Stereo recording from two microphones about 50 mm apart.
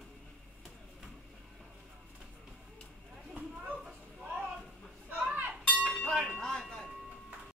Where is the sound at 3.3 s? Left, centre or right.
Right.